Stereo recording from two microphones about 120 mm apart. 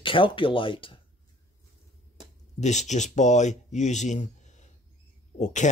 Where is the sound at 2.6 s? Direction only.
75° left (ahead or behind).